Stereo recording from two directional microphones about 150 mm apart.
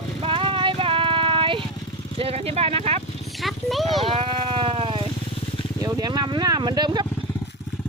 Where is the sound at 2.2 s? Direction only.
40° right (ahead or behind).